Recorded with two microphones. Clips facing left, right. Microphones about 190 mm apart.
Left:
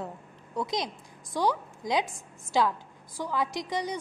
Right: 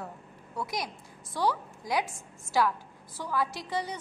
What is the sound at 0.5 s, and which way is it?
A woman's voice, 20° left (ahead or behind).